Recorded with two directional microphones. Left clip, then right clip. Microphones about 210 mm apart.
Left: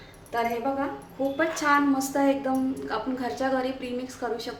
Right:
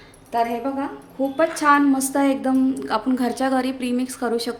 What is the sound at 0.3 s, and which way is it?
A woman's voice, 45° right (ahead or behind).